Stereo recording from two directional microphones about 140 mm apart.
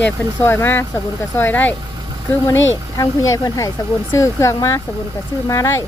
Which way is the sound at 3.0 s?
25° left (ahead or behind).